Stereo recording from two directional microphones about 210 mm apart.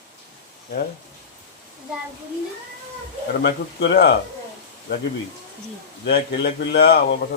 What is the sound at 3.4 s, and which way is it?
Speech, 55° left (ahead or behind).